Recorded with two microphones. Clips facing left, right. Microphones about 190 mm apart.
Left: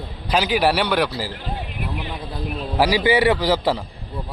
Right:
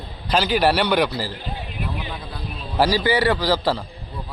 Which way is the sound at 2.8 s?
15° left (ahead or behind).